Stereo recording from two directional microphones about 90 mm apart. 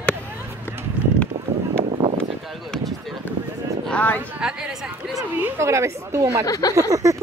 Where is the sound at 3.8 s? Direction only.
15° left (ahead or behind).